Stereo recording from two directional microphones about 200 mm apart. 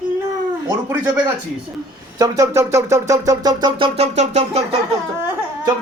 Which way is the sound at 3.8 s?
30° right (ahead or behind).